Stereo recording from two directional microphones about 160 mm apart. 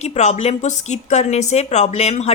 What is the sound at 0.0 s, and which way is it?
A woman's voice, 45° left (ahead or behind).